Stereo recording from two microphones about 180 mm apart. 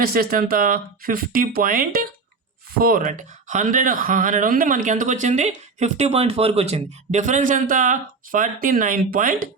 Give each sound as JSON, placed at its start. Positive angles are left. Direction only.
{"t": 0.0, "sound": "speech", "side_deg": -55}